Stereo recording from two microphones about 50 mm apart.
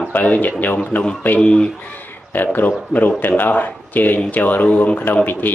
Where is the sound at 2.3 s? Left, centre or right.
Left.